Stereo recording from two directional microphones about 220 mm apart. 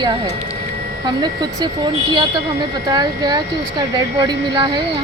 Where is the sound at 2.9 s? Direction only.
20° right (ahead or behind).